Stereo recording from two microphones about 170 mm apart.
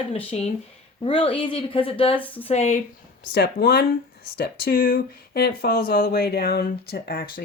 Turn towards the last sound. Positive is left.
turn(degrees=60)  # may be behind; listen again after turning